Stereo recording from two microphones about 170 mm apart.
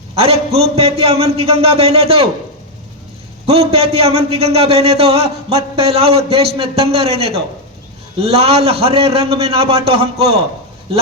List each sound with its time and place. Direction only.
0.2 s a man's voice: 35° right (ahead or behind)
3.4 s a man's voice: 35° right (ahead or behind)